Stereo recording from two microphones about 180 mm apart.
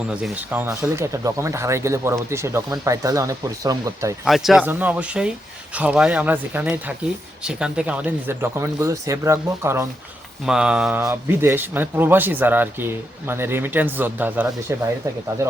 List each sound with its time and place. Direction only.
0.1 s speech: 5° right (ahead or behind)
4.3 s speech: centre (ahead or behind)
10.4 s speech: 5° right (ahead or behind)